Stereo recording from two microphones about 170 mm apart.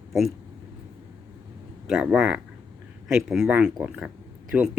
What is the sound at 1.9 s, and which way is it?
Speech, 5° right (ahead or behind).